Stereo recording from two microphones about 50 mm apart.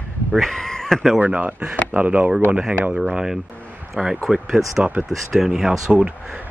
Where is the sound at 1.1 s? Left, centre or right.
Right.